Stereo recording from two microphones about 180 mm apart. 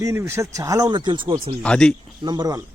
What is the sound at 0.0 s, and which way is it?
Speech, 15° right (ahead or behind).